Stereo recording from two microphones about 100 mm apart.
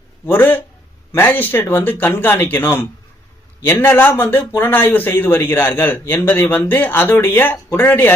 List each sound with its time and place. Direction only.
0.3 s speech: 20° left (ahead or behind)